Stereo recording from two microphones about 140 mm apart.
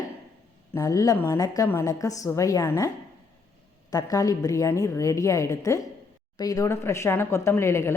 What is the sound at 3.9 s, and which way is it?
Speech, 25° left (ahead or behind).